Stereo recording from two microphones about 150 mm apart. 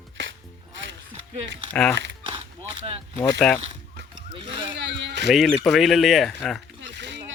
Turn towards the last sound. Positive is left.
turn(degrees=0)  # may be behind; listen again after turning